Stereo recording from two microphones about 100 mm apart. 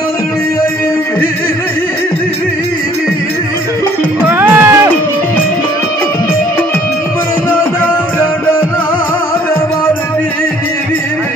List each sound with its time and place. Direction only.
4.3 s music: 20° right (ahead or behind)